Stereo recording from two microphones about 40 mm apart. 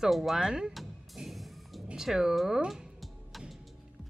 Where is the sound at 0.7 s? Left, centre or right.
Centre.